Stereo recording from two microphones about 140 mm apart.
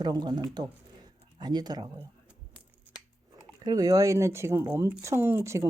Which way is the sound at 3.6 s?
25° right (ahead or behind).